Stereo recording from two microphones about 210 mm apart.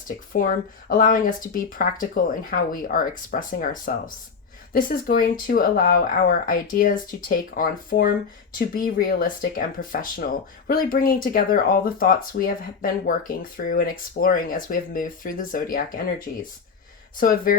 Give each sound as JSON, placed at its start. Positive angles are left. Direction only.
{"t": 0.3, "sound": "speech", "side_deg": 40}